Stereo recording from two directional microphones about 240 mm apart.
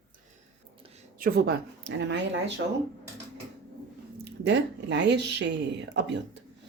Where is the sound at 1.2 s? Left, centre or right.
Right.